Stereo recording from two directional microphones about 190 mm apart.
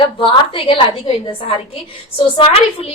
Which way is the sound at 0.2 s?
25° left (ahead or behind).